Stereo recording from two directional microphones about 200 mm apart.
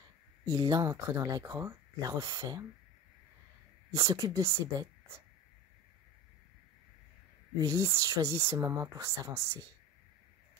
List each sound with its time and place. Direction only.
0.5 s speech: 15° right (ahead or behind)
3.9 s speech: 20° right (ahead or behind)
7.5 s speech: 15° right (ahead or behind)